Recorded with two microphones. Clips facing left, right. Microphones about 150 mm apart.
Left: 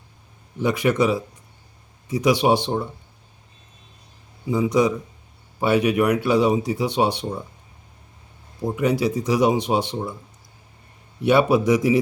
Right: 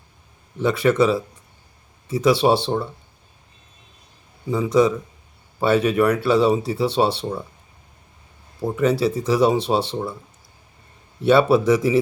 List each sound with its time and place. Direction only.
0.6 s speech: 15° left (ahead or behind)
2.2 s speech: 15° left (ahead or behind)
4.4 s speech: 15° left (ahead or behind)
8.7 s speech: 15° left (ahead or behind)
9.0 s speech: 30° right (ahead or behind)
9.2 s speech: 15° left (ahead or behind)
11.2 s speech: 15° left (ahead or behind)